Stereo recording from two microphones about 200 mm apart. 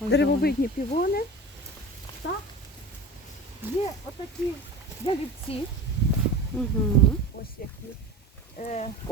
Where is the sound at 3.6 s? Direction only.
10° right (ahead or behind).